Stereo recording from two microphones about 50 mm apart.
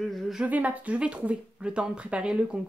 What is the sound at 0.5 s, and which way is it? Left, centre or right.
Speech, right.